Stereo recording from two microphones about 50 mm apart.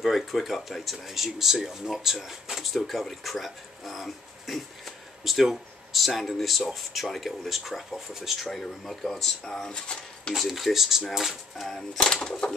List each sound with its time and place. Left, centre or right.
0.0 s speech: centre
9.7 s speech: centre
10.3 s speech: centre